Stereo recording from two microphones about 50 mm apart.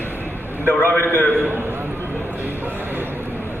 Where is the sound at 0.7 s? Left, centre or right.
Left.